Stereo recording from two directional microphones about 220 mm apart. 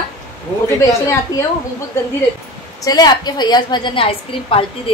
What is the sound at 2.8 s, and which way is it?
A woman's voice, 20° left (ahead or behind).